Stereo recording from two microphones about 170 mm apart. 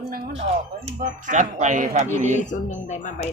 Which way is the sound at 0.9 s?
45° right (ahead or behind).